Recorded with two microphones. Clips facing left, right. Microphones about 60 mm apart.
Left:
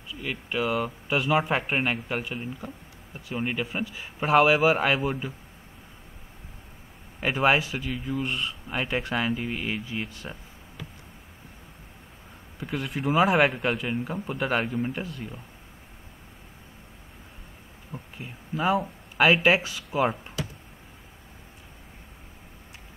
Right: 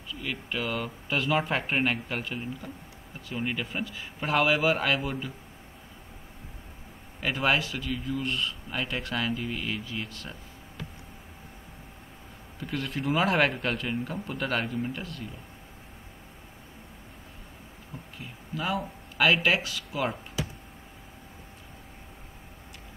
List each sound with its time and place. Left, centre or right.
0.1 s speech: centre
7.2 s speech: left
12.5 s speech: centre
18.1 s speech: left